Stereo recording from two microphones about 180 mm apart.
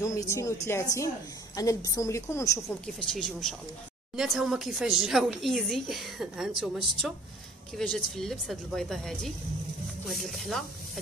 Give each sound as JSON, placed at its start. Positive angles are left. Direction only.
{"t": 0.0, "sound": "a woman's voice", "side_deg": 15}
{"t": 3.0, "sound": "speech", "side_deg": 0}